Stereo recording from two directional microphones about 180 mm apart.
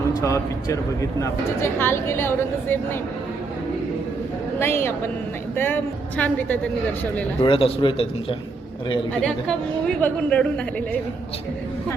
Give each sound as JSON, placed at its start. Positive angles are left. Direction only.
{"t": 0.2, "sound": "a woman's voice", "side_deg": 15}
{"t": 4.6, "sound": "a woman's voice", "side_deg": 15}
{"t": 7.4, "sound": "a man's voice", "side_deg": 30}
{"t": 10.0, "sound": "a woman's voice", "side_deg": 5}